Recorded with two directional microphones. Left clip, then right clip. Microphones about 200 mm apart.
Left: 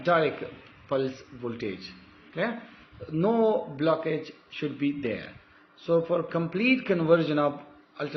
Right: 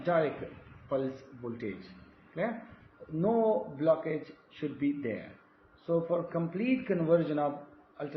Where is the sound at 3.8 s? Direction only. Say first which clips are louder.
Left 2 dB; 45° left (ahead or behind).